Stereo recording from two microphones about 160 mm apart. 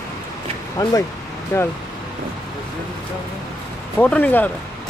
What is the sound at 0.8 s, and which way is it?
Speech, 25° left (ahead or behind).